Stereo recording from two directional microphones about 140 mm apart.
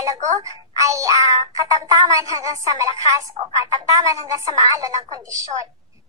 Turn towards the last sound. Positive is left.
turn(degrees=-25)  # may be behind; listen again after turning